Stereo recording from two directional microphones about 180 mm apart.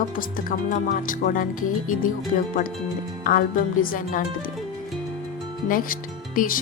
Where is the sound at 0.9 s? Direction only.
50° left (ahead or behind).